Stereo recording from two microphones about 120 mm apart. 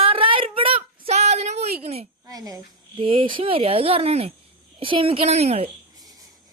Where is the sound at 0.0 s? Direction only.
50° right (ahead or behind).